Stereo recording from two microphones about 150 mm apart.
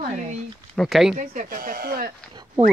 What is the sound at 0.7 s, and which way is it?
Speech, centre (ahead or behind).